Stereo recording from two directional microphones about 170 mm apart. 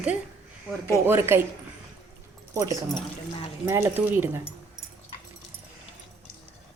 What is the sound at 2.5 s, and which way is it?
A woman's voice, 20° right (ahead or behind).